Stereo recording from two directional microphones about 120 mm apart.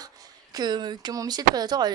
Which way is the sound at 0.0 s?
30° right (ahead or behind).